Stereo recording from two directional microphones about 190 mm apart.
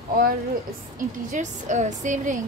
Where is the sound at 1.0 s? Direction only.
40° right (ahead or behind).